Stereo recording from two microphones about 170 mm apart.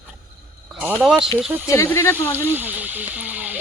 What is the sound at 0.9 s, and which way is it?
Speech, centre (ahead or behind).